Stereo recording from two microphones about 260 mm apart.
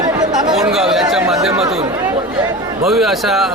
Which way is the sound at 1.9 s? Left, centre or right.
Centre.